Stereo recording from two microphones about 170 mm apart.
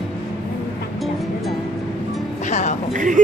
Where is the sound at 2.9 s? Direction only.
50° right (ahead or behind).